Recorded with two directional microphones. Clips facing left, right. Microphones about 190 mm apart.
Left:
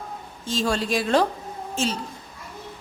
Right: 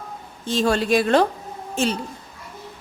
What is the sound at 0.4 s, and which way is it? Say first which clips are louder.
A woman's voice: right 4 dB; 60° right (ahead or behind).